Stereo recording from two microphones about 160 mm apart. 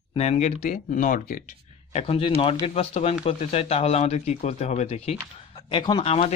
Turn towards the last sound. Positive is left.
turn(degrees=35)  # may be behind; listen again after turning